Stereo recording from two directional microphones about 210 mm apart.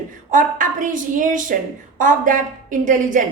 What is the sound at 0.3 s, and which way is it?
A woman's voice, 40° right (ahead or behind).